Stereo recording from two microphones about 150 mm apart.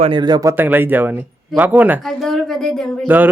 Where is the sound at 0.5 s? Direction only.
15° right (ahead or behind).